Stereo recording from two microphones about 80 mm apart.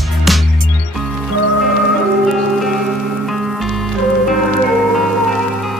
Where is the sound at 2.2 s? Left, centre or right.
Centre.